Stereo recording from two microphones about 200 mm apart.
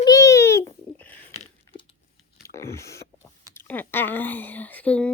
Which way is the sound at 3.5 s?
10° left (ahead or behind).